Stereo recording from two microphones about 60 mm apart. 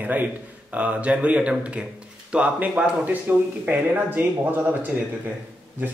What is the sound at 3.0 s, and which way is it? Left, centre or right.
Speech, right.